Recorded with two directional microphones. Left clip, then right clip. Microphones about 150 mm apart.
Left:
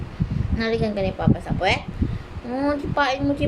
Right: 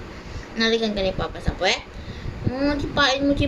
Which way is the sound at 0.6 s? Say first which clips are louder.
Right 2 dB; 15° left (ahead or behind).